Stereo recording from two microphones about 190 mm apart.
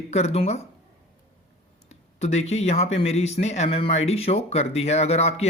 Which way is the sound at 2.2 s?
35° left (ahead or behind).